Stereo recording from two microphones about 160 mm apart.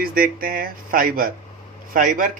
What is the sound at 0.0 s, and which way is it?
Speech, 65° right (ahead or behind).